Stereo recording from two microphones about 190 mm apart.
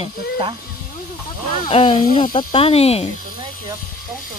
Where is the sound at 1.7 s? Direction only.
30° left (ahead or behind).